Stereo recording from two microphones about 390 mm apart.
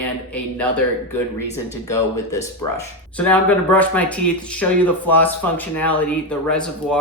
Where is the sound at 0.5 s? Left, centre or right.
Centre.